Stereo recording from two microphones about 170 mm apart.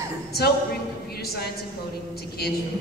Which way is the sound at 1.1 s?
65° left (ahead or behind).